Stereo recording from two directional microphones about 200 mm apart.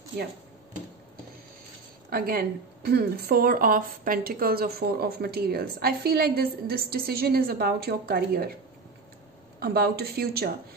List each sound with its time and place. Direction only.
2.0 s speech: 50° right (ahead or behind)
9.6 s speech: 50° right (ahead or behind)